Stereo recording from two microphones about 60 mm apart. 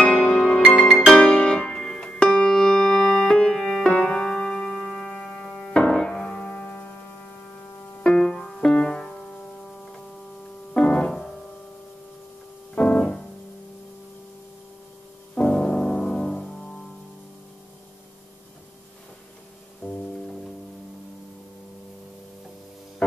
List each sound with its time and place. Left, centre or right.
0.0 s music: centre
8.0 s music: centre
10.7 s music: centre
12.7 s piano: centre
15.3 s music: centre
19.8 s music: centre